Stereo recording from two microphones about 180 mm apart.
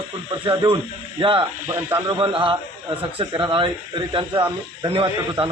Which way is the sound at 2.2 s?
30° right (ahead or behind).